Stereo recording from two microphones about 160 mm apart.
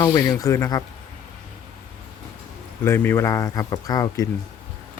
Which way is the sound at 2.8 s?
15° left (ahead or behind).